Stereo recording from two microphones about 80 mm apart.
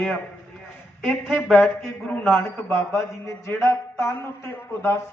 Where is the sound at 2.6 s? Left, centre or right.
Left.